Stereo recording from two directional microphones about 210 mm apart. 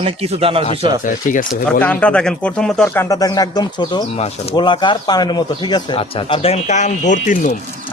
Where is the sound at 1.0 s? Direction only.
40° left (ahead or behind).